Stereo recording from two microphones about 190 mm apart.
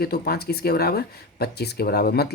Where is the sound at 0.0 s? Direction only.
55° left (ahead or behind).